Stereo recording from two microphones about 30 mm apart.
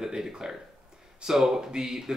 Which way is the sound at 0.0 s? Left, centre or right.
Right.